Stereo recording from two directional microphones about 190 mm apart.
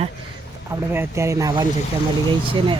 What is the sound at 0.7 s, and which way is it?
Speech, 15° right (ahead or behind).